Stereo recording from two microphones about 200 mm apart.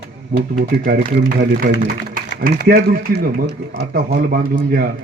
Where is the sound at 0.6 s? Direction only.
50° right (ahead or behind).